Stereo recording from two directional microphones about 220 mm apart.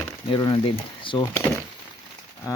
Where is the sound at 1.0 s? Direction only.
20° left (ahead or behind).